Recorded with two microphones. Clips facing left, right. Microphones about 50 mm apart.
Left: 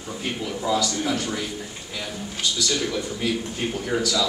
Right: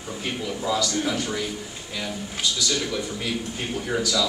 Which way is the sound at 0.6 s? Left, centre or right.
Centre.